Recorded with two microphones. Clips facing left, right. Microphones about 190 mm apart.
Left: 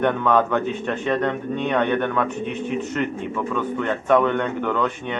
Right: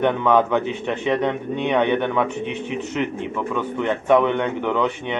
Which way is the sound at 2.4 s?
45° left (ahead or behind).